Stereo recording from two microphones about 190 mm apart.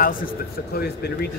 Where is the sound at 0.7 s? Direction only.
55° left (ahead or behind).